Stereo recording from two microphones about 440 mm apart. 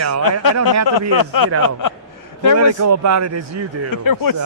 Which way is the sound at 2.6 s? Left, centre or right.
Right.